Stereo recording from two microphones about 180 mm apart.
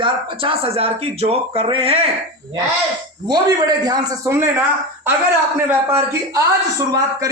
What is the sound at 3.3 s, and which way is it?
A man's voice, 20° right (ahead or behind).